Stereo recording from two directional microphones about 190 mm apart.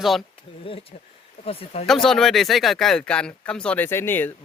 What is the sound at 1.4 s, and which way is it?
Speech, 30° left (ahead or behind).